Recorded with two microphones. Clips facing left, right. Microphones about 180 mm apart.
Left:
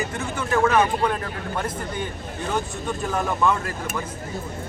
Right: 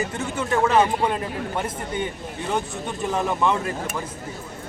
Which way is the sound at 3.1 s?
20° right (ahead or behind).